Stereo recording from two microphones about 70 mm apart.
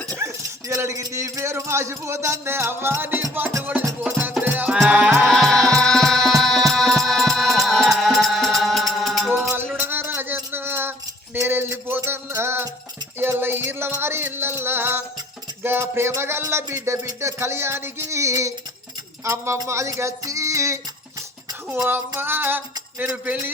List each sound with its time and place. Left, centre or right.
0.2 s dog: right
0.7 s speech: right
3.6 s a sound: right
4.4 s music: right
4.7 s music: centre
5.2 s music: centre
9.7 s a sound: right
11.3 s music: right
15.6 s speech: right
19.2 s music: right
21.8 s a sound: right